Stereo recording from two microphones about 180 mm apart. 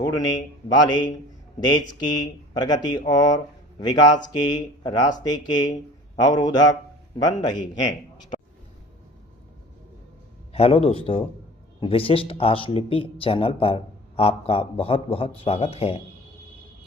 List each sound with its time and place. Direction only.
0.7 s speech: 25° left (ahead or behind)
10.5 s speech: 35° left (ahead or behind)